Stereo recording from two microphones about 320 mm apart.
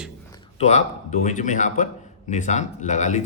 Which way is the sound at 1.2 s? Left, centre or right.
Left.